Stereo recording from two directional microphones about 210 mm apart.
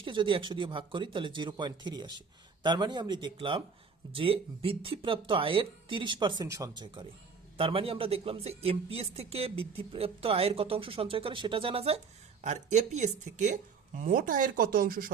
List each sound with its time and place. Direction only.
0.0 s speech: 25° right (ahead or behind); by 15.1 s 45° right (ahead or behind)